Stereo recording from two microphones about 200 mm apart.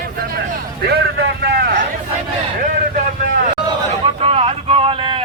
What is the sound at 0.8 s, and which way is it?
Vehicle, 55° right (ahead or behind).